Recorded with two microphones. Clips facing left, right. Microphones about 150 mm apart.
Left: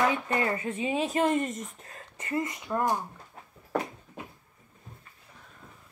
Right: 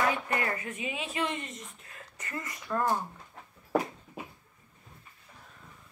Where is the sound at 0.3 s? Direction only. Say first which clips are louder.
Left 4 dB; 20° left (ahead or behind); by 2.0 s 40° left (ahead or behind).